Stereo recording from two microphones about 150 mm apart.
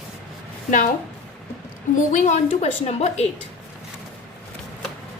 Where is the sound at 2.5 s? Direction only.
45° left (ahead or behind).